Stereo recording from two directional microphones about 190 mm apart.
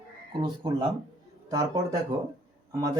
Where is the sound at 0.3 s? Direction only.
25° right (ahead or behind).